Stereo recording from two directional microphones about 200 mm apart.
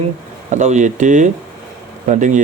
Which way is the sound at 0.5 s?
35° right (ahead or behind).